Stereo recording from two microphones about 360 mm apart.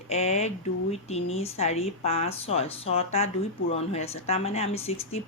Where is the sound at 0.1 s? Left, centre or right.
Centre.